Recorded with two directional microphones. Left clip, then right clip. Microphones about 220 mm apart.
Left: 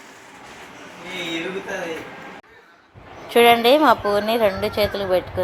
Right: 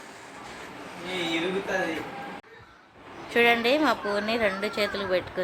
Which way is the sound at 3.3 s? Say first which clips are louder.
Left 8 dB; 15° left (ahead or behind).